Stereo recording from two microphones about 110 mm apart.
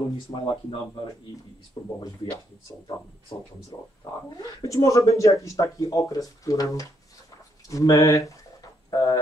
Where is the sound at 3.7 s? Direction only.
35° left (ahead or behind).